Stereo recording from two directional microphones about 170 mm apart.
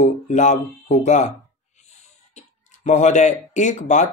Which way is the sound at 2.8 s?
45° left (ahead or behind).